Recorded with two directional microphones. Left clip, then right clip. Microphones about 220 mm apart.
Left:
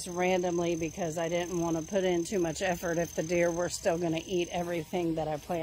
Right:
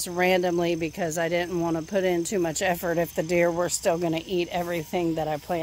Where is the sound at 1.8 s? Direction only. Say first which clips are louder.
Right 4 dB; 15° right (ahead or behind).